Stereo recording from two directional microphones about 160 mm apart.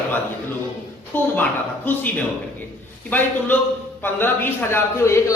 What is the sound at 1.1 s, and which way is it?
A man's voice, 10° left (ahead or behind).